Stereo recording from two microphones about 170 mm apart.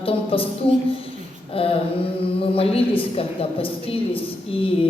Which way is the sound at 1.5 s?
35° left (ahead or behind).